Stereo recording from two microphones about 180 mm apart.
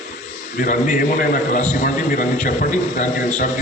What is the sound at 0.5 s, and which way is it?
A man's voice, 45° left (ahead or behind).